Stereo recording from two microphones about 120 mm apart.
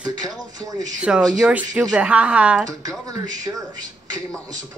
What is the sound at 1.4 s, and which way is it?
Speech, 10° right (ahead or behind).